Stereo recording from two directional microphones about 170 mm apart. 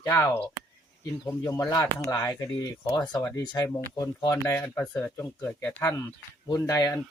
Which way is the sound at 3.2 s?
10° left (ahead or behind).